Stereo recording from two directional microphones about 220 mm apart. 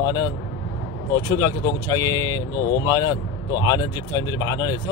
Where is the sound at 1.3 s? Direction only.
15° left (ahead or behind).